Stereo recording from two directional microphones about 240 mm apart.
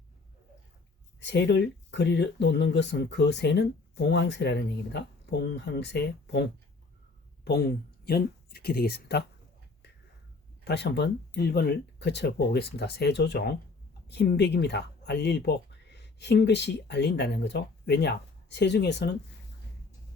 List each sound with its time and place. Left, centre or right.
1.2 s speech: left
10.6 s speech: left